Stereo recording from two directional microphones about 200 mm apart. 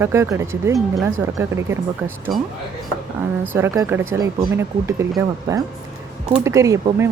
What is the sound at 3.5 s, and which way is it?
Speech, 15° right (ahead or behind).